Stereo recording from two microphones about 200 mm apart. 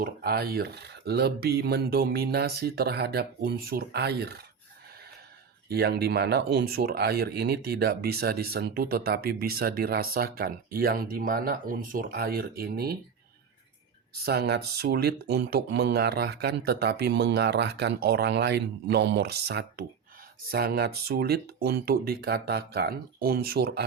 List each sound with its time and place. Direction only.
0.0 s speech: 50° right (ahead or behind)
5.6 s speech: 50° right (ahead or behind)
14.3 s speech: 55° right (ahead or behind)